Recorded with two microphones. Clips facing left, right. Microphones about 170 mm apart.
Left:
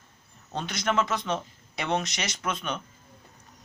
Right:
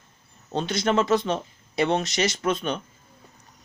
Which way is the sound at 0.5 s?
30° right (ahead or behind).